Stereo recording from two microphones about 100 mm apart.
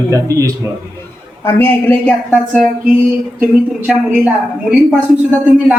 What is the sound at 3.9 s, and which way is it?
Speech, 5° right (ahead or behind).